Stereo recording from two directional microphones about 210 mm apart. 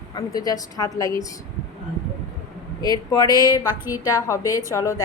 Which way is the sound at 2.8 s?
20° left (ahead or behind).